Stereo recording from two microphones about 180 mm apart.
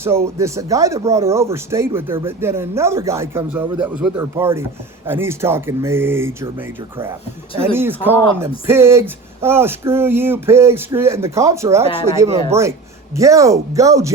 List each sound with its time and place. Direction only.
0.0 s speech: 15° right (ahead or behind)